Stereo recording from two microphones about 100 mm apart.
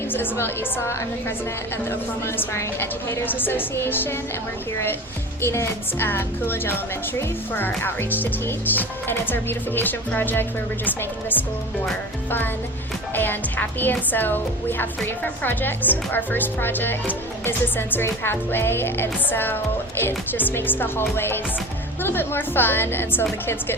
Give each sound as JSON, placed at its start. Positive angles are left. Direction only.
{"t": 0.1, "sound": "a woman's voice", "side_deg": 20}
{"t": 5.4, "sound": "a woman's voice", "side_deg": 25}
{"t": 13.1, "sound": "a woman's voice", "side_deg": 20}